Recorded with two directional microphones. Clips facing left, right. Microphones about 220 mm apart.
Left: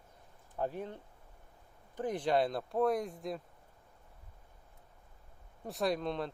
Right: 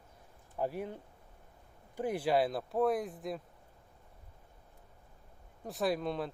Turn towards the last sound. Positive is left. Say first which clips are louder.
# even
turn(degrees=-5)  # may be behind; listen again after turning